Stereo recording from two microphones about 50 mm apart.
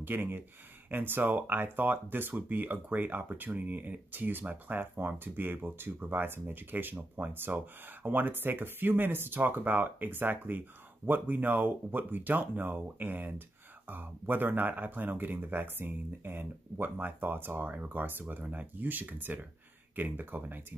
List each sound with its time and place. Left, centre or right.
0.0 s speech: right